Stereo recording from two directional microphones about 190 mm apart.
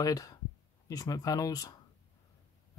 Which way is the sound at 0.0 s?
20° left (ahead or behind).